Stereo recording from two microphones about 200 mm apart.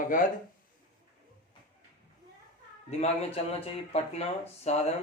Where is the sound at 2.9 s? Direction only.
30° left (ahead or behind).